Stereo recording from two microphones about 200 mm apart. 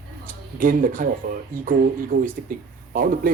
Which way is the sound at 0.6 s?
45° right (ahead or behind).